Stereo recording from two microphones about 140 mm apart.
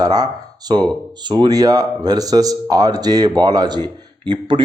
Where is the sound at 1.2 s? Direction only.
30° right (ahead or behind).